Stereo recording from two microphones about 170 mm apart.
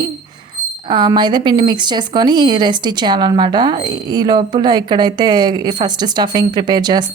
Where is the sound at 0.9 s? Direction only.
25° right (ahead or behind).